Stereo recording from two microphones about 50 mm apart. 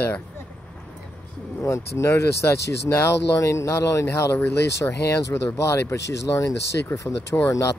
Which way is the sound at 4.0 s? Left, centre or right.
Left.